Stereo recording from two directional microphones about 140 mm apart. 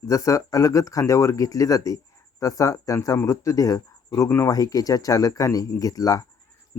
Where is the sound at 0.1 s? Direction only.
25° left (ahead or behind).